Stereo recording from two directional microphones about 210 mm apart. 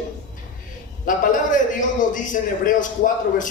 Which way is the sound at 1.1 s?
40° left (ahead or behind).